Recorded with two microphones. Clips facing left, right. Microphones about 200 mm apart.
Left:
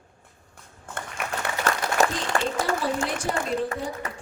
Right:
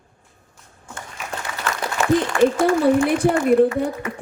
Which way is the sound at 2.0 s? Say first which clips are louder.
Right 5 dB; 40° left (ahead or behind).